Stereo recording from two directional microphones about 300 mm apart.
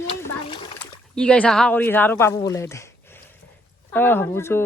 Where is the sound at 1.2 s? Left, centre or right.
Centre.